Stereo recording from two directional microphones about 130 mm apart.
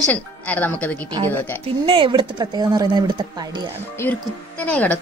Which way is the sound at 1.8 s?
40° right (ahead or behind).